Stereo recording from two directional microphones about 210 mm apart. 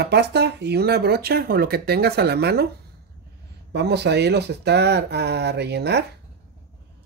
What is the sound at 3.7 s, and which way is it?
Speech, 50° right (ahead or behind).